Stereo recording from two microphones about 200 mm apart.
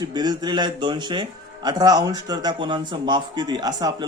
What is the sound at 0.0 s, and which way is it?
A man's voice, 20° right (ahead or behind).